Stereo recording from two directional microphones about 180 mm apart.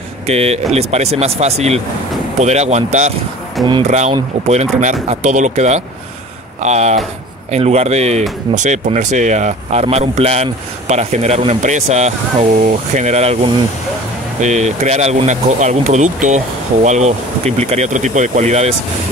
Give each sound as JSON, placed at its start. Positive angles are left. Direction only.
{"t": 0.3, "sound": "speech", "side_deg": -35}
{"t": 14.4, "sound": "speech", "side_deg": -40}